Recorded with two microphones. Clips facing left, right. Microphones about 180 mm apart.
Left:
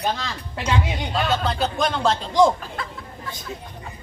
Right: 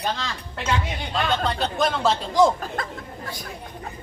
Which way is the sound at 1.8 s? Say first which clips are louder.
Right 1 dB; centre (ahead or behind).